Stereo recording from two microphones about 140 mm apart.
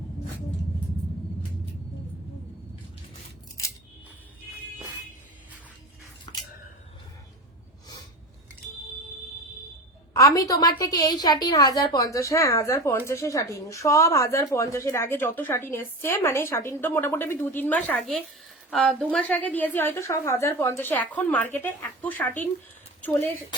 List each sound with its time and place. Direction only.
10.2 s a woman's voice: 25° left (ahead or behind)